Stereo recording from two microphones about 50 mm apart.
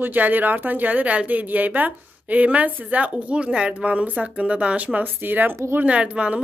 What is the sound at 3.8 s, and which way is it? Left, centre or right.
Speech, right.